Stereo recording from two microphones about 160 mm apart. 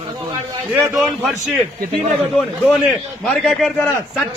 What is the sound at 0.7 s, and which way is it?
Speech, 15° right (ahead or behind).